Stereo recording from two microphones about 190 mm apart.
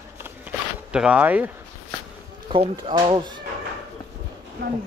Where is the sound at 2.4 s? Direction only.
25° right (ahead or behind).